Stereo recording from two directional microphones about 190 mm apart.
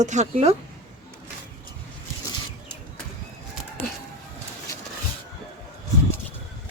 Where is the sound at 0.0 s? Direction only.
40° right (ahead or behind).